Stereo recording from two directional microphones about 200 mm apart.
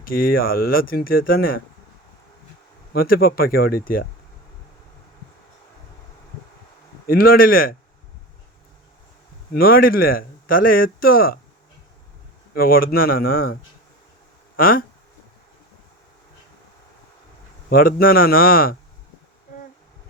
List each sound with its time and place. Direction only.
0.0 s speech: 45° left (ahead or behind)
2.9 s speech: 50° left (ahead or behind)
7.1 s speech: 45° left (ahead or behind)
9.5 s speech: 50° left (ahead or behind)
12.5 s speech: 45° left (ahead or behind)
17.7 s speech: 45° left (ahead or behind)